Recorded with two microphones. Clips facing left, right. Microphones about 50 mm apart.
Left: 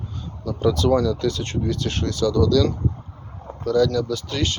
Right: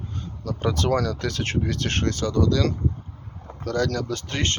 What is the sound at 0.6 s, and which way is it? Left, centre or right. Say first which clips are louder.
Speech: left 5 dB; right.